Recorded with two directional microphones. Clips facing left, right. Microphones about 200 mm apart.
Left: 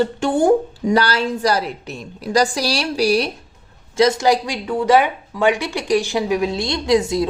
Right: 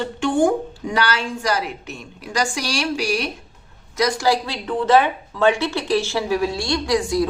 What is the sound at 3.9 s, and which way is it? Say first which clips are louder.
A woman's voice: left 4 dB; 25° left (ahead or behind).